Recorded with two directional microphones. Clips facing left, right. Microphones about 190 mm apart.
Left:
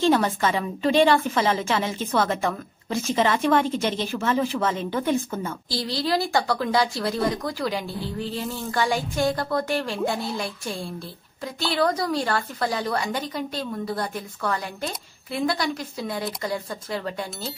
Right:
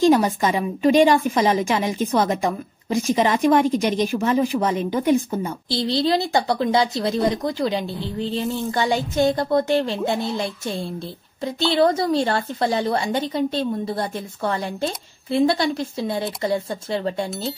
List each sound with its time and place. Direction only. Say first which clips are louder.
0.0 s a woman's voice: right 4 dB; 15° right (ahead or behind)